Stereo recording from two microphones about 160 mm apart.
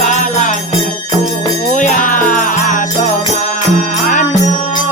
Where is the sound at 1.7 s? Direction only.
50° left (ahead or behind).